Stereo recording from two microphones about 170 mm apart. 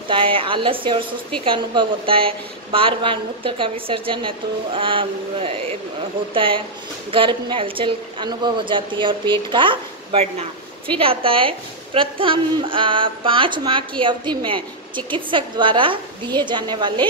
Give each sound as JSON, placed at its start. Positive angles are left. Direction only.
{"t": 0.1, "sound": "a woman's voice", "side_deg": -30}